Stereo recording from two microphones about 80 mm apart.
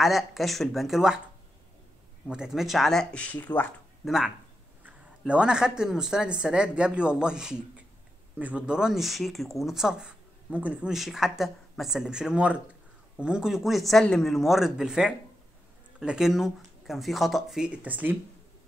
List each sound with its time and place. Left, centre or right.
0.0 s speech: centre
2.2 s speech: centre; by 3.6 s left
4.0 s speech: centre
10.9 s speech: centre
17.8 s speech: right